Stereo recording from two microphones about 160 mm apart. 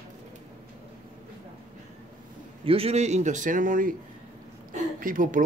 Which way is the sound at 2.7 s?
40° right (ahead or behind).